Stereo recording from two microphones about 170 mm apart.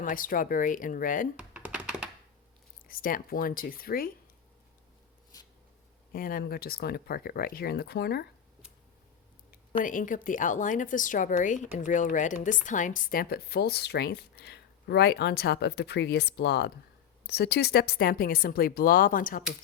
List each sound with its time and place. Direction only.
0.0 s speech: 55° left (ahead or behind)
1.4 s computer keyboard: 5° right (ahead or behind)
2.8 s speech: 55° left (ahead or behind)
5.3 s writing: 20° left (ahead or behind)
6.1 s speech: 60° left (ahead or behind)
9.8 s speech: 50° left (ahead or behind)